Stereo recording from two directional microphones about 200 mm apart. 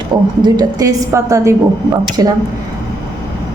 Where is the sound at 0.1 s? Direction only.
20° right (ahead or behind).